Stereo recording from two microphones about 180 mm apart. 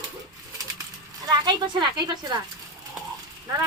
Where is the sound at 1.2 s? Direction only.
25° right (ahead or behind).